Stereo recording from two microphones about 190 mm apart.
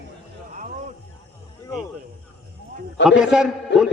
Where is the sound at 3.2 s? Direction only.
5° right (ahead or behind).